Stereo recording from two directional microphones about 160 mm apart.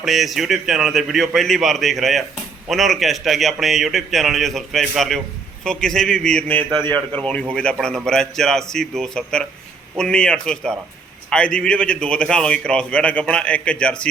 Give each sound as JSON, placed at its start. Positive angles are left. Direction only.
{"t": 0.0, "sound": "a man's voice", "side_deg": 0}
{"t": 6.7, "sound": "a man's voice", "side_deg": -25}
{"t": 7.2, "sound": "a man's voice", "side_deg": 5}